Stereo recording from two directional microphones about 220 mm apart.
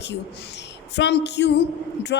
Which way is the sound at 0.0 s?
50° left (ahead or behind).